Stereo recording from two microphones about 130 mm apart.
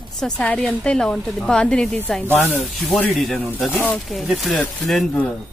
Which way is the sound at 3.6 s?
15° left (ahead or behind).